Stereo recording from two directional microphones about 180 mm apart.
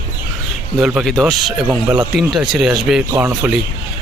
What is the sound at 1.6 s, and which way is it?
Speech, 10° right (ahead or behind).